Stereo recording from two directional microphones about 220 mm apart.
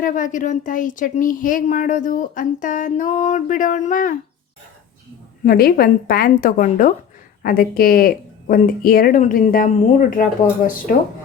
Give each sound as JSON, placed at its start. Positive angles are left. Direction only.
{"t": 0.0, "sound": "speech", "side_deg": 35}
{"t": 5.5, "sound": "speech", "side_deg": 45}